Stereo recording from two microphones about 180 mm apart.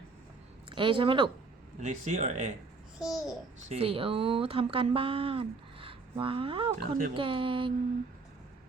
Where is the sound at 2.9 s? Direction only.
5° right (ahead or behind).